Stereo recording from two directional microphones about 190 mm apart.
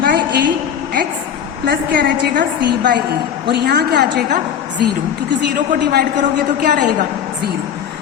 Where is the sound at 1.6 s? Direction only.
60° right (ahead or behind).